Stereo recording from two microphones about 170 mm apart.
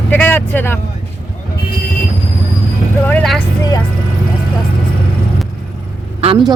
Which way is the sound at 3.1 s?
5° left (ahead or behind).